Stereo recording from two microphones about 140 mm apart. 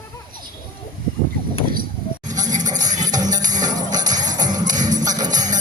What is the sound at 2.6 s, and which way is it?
Music, 25° right (ahead or behind).